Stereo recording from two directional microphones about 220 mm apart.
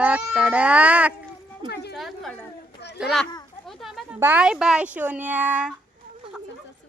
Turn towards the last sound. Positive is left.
turn(degrees=-5)  # may be behind; listen again after turning